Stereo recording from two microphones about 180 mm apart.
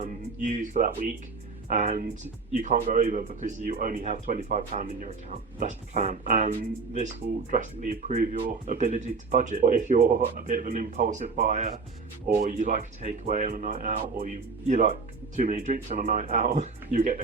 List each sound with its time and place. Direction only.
0.0 s music: 45° right (ahead or behind)
1.6 s a woman's voice: 40° right (ahead or behind)
3.7 s speech: 55° right (ahead or behind)